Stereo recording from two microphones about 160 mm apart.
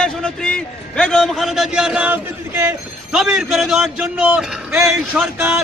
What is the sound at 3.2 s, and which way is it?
A man's voice, centre (ahead or behind).